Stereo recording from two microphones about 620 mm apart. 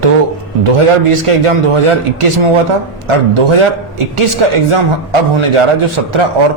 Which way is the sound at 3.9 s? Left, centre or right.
Right.